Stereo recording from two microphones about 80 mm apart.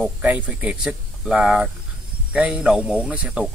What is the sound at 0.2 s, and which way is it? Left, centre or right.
Speech, centre.